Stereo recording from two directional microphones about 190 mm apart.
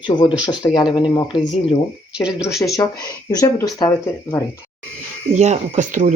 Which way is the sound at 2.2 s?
5° right (ahead or behind).